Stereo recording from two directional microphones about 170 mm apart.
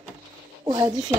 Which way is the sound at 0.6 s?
25° right (ahead or behind).